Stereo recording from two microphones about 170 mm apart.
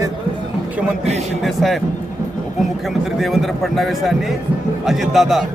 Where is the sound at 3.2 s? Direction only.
Centre (ahead or behind).